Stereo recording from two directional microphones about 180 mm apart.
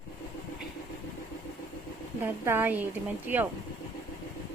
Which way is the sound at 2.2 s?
10° right (ahead or behind).